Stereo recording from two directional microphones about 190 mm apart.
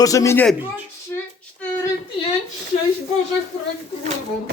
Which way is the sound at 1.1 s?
10° left (ahead or behind).